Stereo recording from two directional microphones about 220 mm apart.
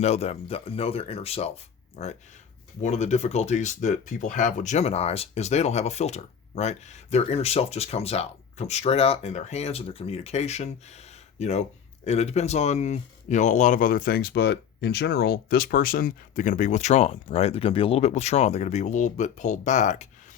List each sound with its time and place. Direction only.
0.0 s speech: 30° left (ahead or behind)